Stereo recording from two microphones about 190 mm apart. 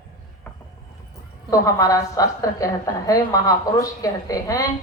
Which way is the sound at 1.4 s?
20° left (ahead or behind).